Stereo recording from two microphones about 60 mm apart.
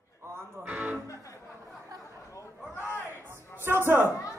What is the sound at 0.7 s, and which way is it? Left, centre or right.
Music, right.